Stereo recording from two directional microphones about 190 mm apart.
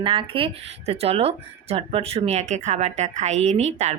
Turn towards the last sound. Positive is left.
turn(degrees=-35)  # may be behind; listen again after turning